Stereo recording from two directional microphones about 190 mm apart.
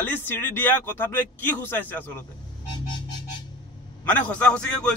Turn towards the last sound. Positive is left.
turn(degrees=5)  # may be behind; listen again after turning